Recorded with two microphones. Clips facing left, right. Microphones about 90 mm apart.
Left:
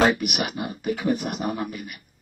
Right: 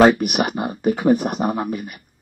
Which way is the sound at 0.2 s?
40° right (ahead or behind).